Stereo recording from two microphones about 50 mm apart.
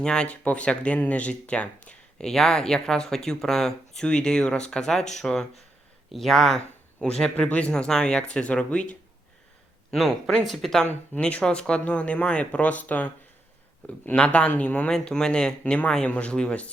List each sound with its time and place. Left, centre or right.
0.0 s speech: centre
0.3 s speech: left; by 6.6 s centre
7.0 s speech: centre
9.9 s speech: centre
11.1 s speech: left
14.8 s speech: centre
15.6 s speech: left